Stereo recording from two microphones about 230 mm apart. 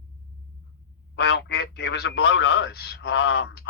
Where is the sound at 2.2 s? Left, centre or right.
Left.